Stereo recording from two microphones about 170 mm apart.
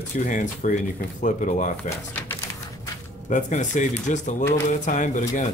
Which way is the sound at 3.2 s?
45° left (ahead or behind).